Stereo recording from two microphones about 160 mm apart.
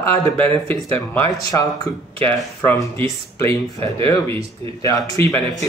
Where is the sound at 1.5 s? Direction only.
20° left (ahead or behind).